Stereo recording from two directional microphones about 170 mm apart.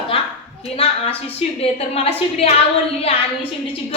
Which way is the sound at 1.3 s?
35° left (ahead or behind).